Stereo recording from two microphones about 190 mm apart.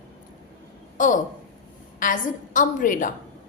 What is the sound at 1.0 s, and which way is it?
A woman's voice, 40° left (ahead or behind).